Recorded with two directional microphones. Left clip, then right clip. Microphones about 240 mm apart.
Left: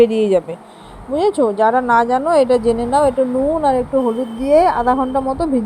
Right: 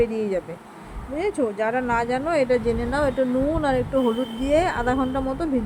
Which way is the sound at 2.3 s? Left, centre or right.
Centre.